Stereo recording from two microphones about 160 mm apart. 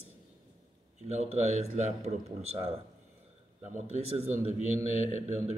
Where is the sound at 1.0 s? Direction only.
45° right (ahead or behind).